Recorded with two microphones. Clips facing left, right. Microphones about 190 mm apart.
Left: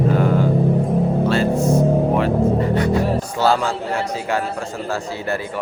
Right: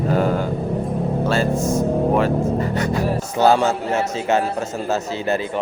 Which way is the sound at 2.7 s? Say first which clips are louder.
Left 3 dB; 45° right (ahead or behind).